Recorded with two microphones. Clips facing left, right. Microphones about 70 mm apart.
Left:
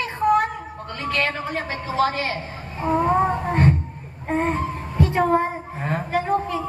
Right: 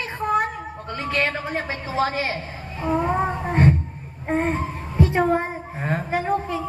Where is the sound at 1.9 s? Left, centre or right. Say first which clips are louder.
Left 1 dB; right.